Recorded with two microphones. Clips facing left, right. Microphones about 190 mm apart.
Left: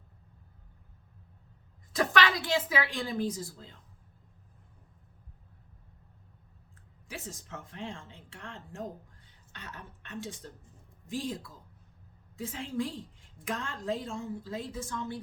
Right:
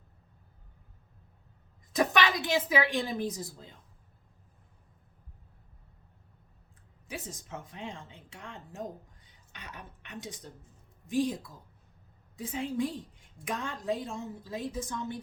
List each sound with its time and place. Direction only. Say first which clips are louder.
1.9 s a woman's voice: right 1 dB; 20° right (ahead or behind)
7.1 s a woman's voice: right 2 dB; 20° right (ahead or behind)